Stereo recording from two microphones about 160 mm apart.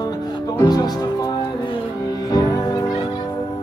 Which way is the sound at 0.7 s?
25° left (ahead or behind).